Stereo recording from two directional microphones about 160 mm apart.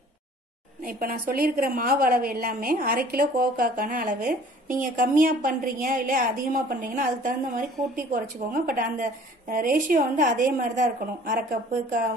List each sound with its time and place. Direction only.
0.8 s a woman's voice: 65° right (ahead or behind)